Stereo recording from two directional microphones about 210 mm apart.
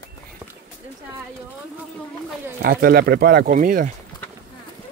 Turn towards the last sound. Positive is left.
turn(degrees=-40)  # may be behind; listen again after turning